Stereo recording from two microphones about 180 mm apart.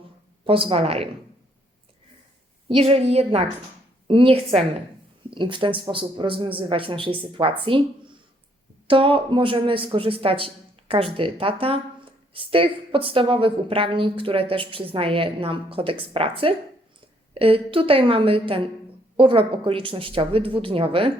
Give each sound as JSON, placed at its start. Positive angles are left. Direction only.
{"t": 0.4, "sound": "speech", "side_deg": -30}
{"t": 2.6, "sound": "a woman's voice", "side_deg": -35}
{"t": 17.3, "sound": "speech", "side_deg": -30}